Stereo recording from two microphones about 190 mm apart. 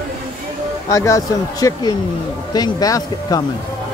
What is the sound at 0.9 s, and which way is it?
Speech, 15° left (ahead or behind).